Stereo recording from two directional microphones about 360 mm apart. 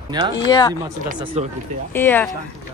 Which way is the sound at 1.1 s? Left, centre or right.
Centre.